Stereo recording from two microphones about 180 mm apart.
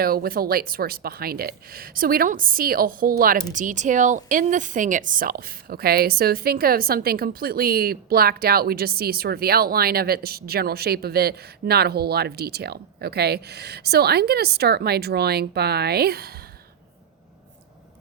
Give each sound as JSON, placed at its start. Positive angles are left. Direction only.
{"t": 0.0, "sound": "speech", "side_deg": -55}